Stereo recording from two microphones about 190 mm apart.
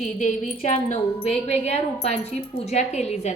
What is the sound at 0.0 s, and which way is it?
A woman's voice, 40° left (ahead or behind).